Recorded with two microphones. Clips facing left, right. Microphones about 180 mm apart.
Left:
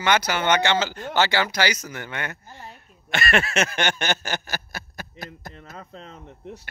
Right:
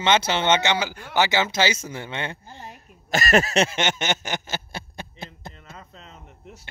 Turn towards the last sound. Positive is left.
turn(degrees=45)  # may be behind; listen again after turning